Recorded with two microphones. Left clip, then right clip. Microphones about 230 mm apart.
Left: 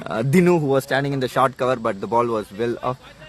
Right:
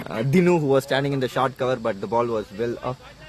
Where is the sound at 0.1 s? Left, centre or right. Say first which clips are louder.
Left 2 dB; left.